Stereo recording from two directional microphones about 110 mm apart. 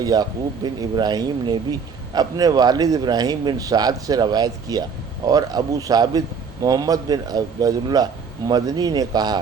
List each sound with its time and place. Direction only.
0.0 s speech: 35° right (ahead or behind)